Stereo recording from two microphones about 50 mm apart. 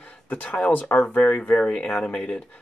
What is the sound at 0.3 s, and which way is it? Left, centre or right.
Speech, left.